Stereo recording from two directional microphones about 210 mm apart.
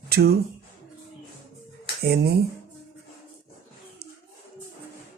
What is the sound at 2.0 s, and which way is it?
Speech, 50° right (ahead or behind).